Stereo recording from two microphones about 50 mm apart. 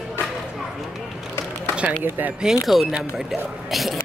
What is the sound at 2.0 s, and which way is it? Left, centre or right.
Speech, right.